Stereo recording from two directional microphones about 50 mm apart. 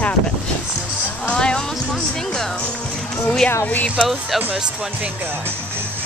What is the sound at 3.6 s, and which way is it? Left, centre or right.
Speech, left.